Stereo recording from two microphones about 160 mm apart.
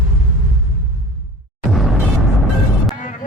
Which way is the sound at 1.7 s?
Centre (ahead or behind).